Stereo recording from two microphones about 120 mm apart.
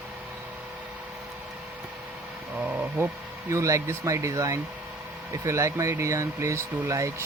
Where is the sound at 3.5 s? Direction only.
25° right (ahead or behind).